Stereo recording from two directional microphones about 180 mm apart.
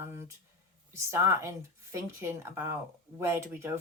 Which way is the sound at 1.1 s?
15° right (ahead or behind).